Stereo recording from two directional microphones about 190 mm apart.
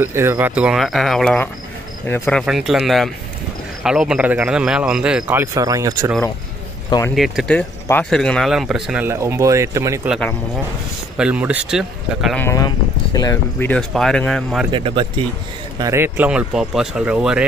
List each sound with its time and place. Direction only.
0.0 s speech: 10° right (ahead or behind); by 2.4 s 10° left (ahead or behind)
2.4 s speech: centre (ahead or behind); by 6.1 s 15° right (ahead or behind)
7.2 s speech: centre (ahead or behind)
10.0 s speech: centre (ahead or behind)
12.4 s speech: 15° left (ahead or behind)
14.7 s speech: 30° right (ahead or behind)
15.8 s speech: 15° right (ahead or behind)